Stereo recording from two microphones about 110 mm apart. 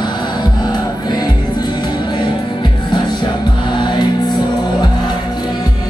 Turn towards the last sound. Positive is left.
turn(degrees=40)  # may be behind; listen again after turning